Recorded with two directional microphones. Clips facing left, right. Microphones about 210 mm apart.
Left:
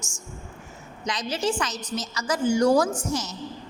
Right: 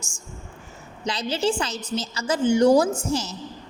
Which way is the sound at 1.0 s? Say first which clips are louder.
Right 3 dB; 30° right (ahead or behind).